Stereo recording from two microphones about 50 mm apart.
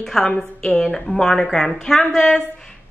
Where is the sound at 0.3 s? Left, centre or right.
Centre.